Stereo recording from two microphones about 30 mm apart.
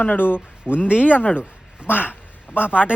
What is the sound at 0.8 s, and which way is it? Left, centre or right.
Speech, right.